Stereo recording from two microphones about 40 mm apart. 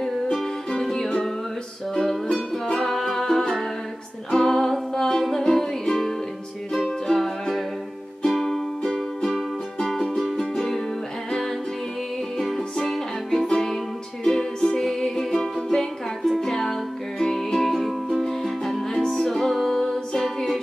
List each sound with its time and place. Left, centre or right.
0.0 s music: centre
17.7 s music: centre